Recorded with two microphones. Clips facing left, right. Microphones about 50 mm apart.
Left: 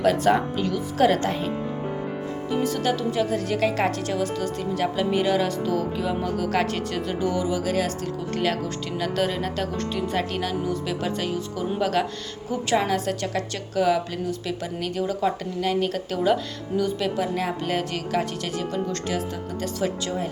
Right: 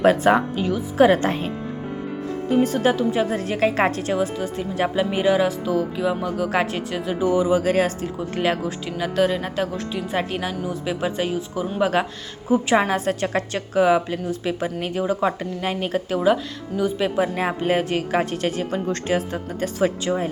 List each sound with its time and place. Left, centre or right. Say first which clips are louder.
0.0 s a woman's voice: right 4 dB; right
0.3 s speech: right 2 dB; centre
2.5 s a woman's voice: right 5 dB; right
7.5 s a woman's voice: right 6 dB; right
8.0 s a woman's voice: right 2 dB; centre
8.6 s a woman's voice: right 2 dB; centre
17.2 s a woman's voice: right 4 dB; right